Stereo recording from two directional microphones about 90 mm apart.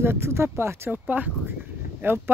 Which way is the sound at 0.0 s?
25° right (ahead or behind).